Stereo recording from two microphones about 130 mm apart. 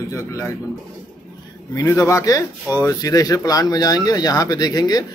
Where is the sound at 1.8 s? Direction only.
25° left (ahead or behind).